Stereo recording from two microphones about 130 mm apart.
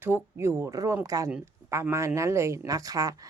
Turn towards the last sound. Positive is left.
turn(degrees=-25)  # may be behind; listen again after turning